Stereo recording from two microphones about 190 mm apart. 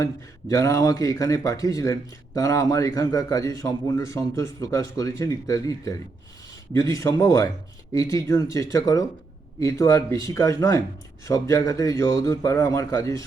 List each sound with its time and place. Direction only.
0.0 s speech: 15° left (ahead or behind)